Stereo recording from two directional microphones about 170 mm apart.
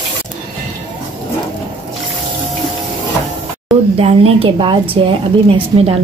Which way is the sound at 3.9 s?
35° right (ahead or behind).